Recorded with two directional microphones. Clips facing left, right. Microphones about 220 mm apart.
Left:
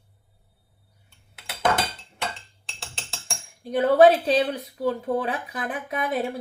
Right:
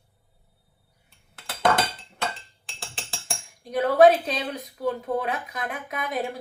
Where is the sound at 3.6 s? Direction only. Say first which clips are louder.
Left 1 dB; 30° left (ahead or behind).